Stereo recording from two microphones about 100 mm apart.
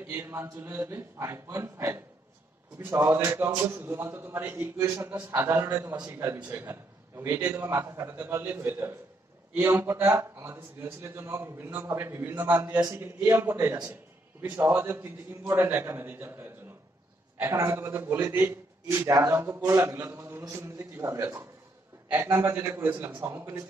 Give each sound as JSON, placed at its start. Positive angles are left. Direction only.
{"t": 0.1, "sound": "a man's voice", "side_deg": -20}